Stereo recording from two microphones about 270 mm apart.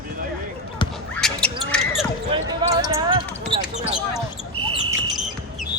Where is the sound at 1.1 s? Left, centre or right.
Centre.